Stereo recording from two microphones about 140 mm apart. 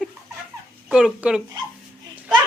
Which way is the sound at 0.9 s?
5° right (ahead or behind).